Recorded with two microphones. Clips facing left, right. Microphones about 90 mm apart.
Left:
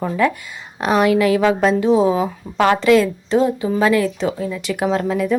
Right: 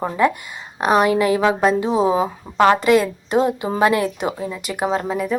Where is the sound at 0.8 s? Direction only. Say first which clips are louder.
Even; 5° right (ahead or behind).